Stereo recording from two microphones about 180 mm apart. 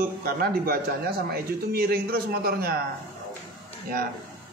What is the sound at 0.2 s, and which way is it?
Speech, 55° right (ahead or behind).